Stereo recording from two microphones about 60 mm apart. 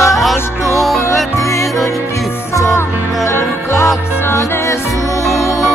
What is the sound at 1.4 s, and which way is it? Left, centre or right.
Music, left.